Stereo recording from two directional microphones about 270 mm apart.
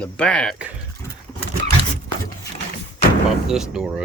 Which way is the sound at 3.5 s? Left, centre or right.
Centre.